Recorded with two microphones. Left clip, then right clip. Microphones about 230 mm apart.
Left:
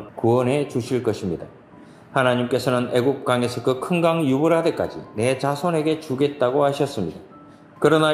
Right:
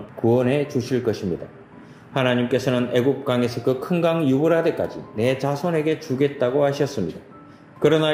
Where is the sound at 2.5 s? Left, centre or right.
Centre.